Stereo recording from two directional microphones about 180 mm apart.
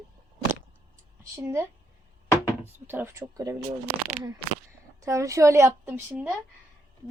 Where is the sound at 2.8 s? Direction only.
15° right (ahead or behind).